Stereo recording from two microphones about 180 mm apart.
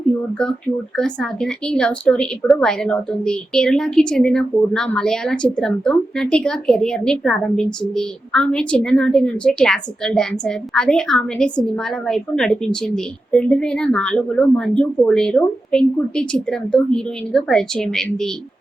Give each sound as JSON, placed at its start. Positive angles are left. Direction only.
{"t": 0.9, "sound": "a woman's voice", "side_deg": 5}